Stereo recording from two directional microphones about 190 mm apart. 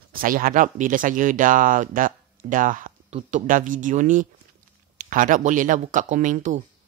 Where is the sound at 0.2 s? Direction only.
45° right (ahead or behind).